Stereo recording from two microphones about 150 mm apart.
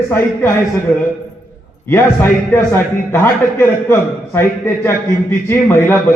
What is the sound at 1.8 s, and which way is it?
A man's voice, 15° left (ahead or behind).